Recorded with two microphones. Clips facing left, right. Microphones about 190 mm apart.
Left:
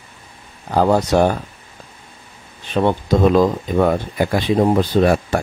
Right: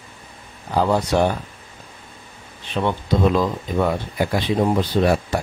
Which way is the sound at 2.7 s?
45° left (ahead or behind).